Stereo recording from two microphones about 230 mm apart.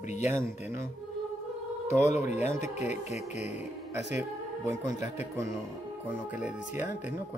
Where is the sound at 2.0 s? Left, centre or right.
Left.